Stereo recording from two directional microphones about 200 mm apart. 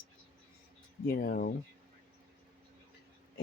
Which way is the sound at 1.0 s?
50° left (ahead or behind).